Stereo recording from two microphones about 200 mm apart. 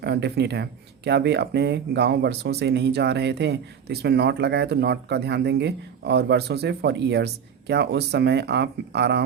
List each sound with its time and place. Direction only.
0.0 s speech: 55° right (ahead or behind)